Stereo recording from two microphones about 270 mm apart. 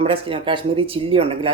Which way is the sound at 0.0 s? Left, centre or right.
Right.